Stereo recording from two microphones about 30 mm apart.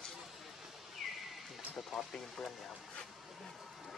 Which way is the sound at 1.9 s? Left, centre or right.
Centre.